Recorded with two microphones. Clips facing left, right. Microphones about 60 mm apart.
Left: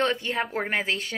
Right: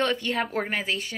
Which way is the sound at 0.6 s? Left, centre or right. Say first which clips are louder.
Left 2 dB; left.